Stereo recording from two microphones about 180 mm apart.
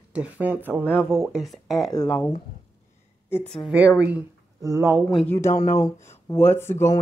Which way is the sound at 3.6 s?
10° right (ahead or behind).